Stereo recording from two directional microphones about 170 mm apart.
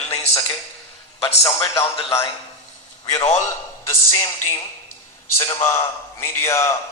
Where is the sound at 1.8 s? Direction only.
15° left (ahead or behind).